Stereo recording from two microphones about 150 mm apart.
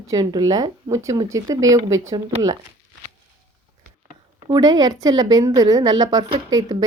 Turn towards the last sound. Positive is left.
turn(degrees=-25)  # may be behind; listen again after turning